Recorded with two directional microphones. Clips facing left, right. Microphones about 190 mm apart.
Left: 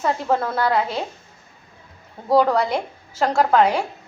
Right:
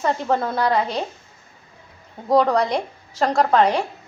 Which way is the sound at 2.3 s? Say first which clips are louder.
Even; 5° left (ahead or behind).